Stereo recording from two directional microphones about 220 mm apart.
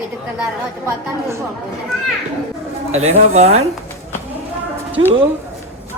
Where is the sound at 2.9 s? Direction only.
30° right (ahead or behind).